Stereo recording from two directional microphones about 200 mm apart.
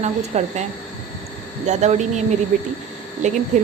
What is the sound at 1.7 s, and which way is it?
A woman's voice, 35° right (ahead or behind).